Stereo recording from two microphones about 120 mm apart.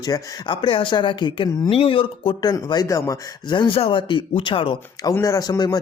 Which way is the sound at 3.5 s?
40° left (ahead or behind).